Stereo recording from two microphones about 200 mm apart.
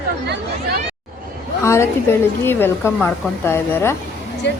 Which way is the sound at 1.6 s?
15° left (ahead or behind).